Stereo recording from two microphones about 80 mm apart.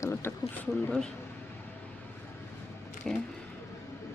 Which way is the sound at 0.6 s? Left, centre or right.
Centre.